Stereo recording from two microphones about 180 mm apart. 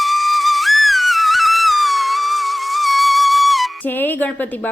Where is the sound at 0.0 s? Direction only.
Centre (ahead or behind).